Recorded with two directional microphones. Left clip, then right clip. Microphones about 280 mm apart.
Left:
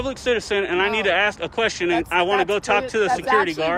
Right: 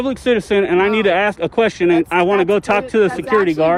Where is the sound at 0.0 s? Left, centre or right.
Right.